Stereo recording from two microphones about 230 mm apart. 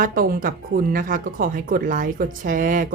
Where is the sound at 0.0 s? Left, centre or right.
Right.